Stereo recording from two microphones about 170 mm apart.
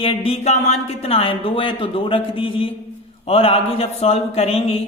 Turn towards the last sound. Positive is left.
turn(degrees=35)  # may be behind; listen again after turning